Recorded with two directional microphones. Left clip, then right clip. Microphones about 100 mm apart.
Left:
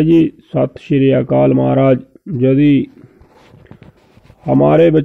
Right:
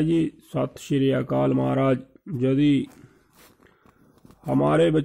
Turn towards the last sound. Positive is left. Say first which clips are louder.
# left 10 dB
turn(degrees=30)  # may be behind; listen again after turning